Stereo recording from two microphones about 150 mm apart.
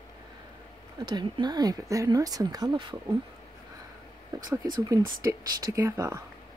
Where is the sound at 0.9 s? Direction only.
30° right (ahead or behind).